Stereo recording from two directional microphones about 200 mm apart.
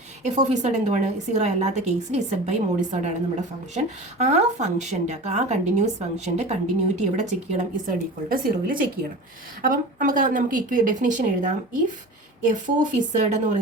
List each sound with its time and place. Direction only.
0.2 s speech: 35° right (ahead or behind)
4.2 s speech: 35° right (ahead or behind)